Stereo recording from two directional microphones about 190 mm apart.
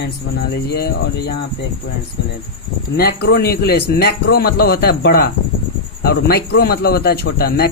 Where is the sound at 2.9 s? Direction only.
55° left (ahead or behind).